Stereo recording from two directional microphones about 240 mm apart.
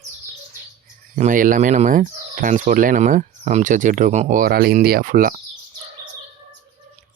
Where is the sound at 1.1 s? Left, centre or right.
Right.